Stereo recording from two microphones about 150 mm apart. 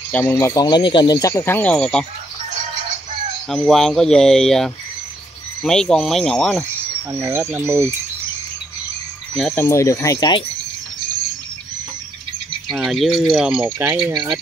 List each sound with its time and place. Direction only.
0.1 s speech: 15° left (ahead or behind)
3.4 s speech: 5° left (ahead or behind)
7.1 s speech: 15° right (ahead or behind)
9.3 s speech: 5° left (ahead or behind)
9.7 s speech: 20° left (ahead or behind)
12.6 s speech: centre (ahead or behind)
14.1 s speech: 30° right (ahead or behind)